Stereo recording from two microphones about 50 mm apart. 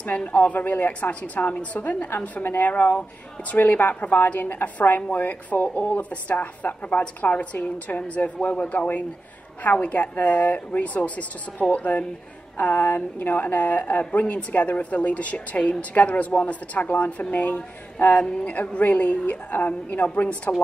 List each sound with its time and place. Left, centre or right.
0.0 s speech: left
1.2 s speech: left
5.1 s speech: left